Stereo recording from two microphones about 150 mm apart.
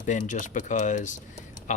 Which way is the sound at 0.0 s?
55° left (ahead or behind).